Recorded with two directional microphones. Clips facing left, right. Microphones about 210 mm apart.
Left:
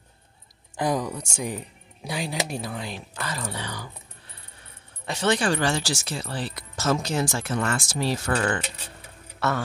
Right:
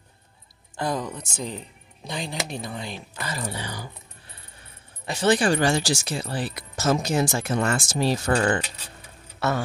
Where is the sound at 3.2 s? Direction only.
10° right (ahead or behind).